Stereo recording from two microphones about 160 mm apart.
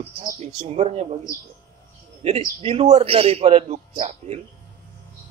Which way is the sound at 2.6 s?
40° right (ahead or behind).